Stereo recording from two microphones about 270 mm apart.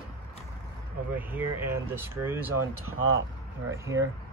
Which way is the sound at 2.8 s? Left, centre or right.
Right.